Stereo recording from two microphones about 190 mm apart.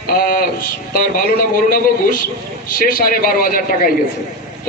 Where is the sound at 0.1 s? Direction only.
50° left (ahead or behind).